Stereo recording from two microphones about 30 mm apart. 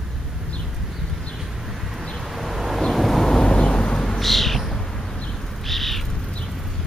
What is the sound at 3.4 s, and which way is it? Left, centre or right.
Vehicle, left.